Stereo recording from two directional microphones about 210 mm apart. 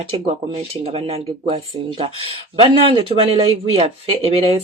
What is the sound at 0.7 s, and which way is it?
Speech, 30° right (ahead or behind).